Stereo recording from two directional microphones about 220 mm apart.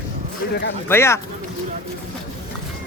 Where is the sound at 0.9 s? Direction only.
10° left (ahead or behind).